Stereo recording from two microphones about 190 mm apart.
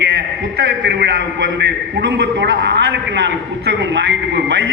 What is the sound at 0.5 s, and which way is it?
A man's voice, 60° right (ahead or behind).